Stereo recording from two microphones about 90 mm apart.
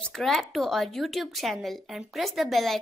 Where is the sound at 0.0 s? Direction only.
5° left (ahead or behind).